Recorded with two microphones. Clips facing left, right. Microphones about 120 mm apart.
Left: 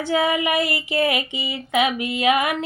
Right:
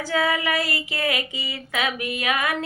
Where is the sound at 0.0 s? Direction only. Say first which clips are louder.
Left 3 dB; 20° left (ahead or behind).